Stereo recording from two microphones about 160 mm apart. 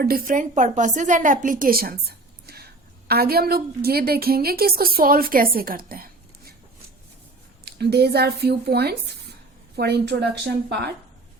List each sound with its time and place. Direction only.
0.0 s a woman's voice: 60° right (ahead or behind)
7.6 s speech: 90° right